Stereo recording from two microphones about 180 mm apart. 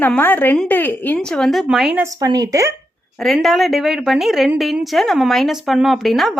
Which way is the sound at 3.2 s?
Centre (ahead or behind).